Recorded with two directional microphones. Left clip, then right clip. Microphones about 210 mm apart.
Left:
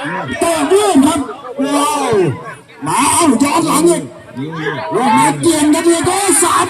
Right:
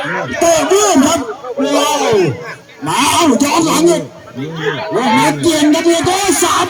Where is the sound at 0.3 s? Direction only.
20° right (ahead or behind).